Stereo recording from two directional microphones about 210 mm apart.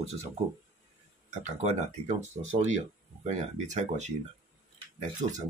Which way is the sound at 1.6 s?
35° right (ahead or behind).